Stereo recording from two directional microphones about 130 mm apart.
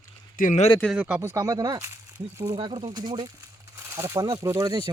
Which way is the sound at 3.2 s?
25° right (ahead or behind).